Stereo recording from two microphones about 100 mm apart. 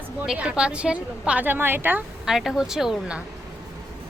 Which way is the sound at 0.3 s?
10° right (ahead or behind).